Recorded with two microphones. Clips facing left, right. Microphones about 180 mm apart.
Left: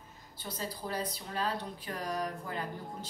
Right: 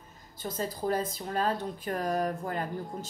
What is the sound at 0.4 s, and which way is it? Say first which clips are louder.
Speech: right 7 dB; 50° right (ahead or behind).